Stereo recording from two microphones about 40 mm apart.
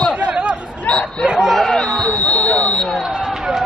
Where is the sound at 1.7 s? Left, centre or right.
Centre.